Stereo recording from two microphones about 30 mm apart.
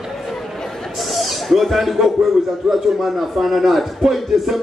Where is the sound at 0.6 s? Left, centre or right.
Centre.